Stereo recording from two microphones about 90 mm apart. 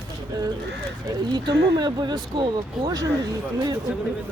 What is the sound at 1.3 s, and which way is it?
Speech, 55° right (ahead or behind).